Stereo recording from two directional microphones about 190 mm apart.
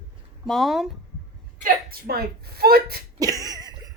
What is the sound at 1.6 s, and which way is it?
A woman's voice, 55° right (ahead or behind).